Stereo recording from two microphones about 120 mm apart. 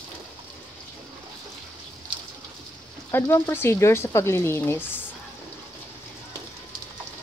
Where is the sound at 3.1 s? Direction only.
20° left (ahead or behind).